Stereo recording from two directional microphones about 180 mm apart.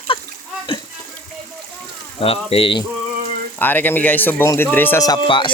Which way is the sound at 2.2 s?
30° left (ahead or behind).